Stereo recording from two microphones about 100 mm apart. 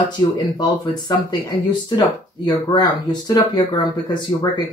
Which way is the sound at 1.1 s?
40° left (ahead or behind).